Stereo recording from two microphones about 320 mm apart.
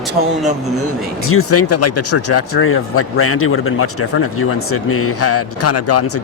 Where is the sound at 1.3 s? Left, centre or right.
Left.